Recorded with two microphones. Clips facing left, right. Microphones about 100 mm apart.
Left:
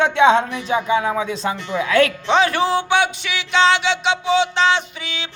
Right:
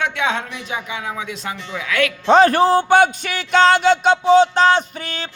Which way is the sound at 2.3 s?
45° right (ahead or behind).